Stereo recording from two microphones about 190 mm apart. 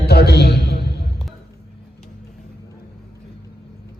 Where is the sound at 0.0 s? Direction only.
60° left (ahead or behind).